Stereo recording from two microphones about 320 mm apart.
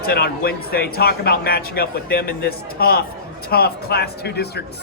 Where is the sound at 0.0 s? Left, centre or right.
Left.